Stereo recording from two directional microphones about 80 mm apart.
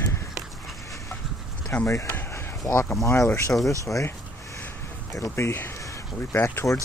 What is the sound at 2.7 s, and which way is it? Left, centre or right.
Speech, left.